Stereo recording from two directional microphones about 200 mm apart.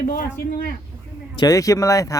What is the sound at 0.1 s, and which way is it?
Speech, 45° left (ahead or behind).